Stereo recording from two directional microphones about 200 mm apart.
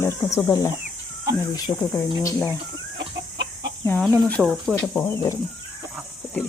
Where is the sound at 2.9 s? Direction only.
60° right (ahead or behind).